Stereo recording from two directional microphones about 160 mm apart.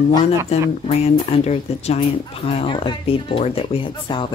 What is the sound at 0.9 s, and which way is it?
Speech, 40° left (ahead or behind).